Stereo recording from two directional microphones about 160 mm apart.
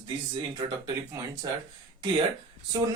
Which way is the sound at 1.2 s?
20° right (ahead or behind).